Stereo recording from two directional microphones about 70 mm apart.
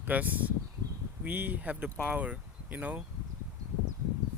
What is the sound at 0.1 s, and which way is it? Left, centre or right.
Speech, right.